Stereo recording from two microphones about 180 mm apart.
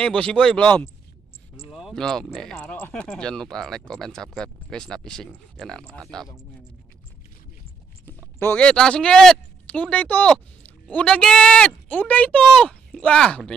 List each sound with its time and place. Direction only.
0.0 s speech: 5° left (ahead or behind)
8.4 s speech: 10° left (ahead or behind)